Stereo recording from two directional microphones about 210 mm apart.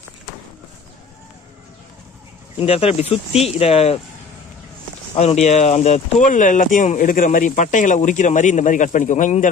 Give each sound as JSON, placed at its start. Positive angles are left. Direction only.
{"t": 2.6, "sound": "speech", "side_deg": 30}
{"t": 5.1, "sound": "speech", "side_deg": 30}